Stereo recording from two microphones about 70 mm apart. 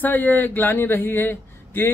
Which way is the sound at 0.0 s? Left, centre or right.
Left.